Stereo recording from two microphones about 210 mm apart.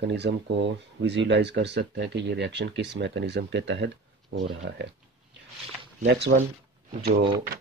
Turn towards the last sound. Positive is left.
turn(degrees=-45)  # may be behind; listen again after turning